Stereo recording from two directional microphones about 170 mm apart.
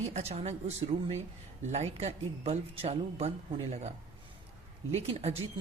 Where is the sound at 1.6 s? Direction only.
40° right (ahead or behind).